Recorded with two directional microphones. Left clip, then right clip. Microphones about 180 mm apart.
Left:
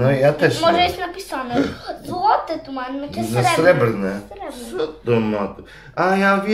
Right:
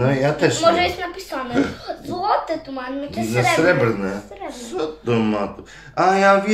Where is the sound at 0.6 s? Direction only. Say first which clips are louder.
Right 1 dB; 15° left (ahead or behind).